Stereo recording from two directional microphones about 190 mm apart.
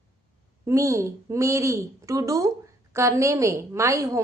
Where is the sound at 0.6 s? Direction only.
15° right (ahead or behind).